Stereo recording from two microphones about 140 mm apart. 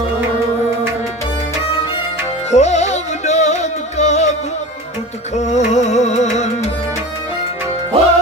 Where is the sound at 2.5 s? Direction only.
55° left (ahead or behind).